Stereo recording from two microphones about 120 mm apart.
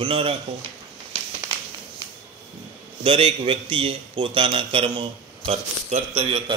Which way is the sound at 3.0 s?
50° right (ahead or behind).